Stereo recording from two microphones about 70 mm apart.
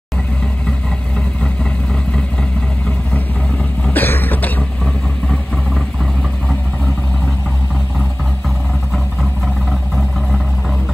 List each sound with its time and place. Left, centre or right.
3.1 s vehicle: centre
8.9 s vehicle: centre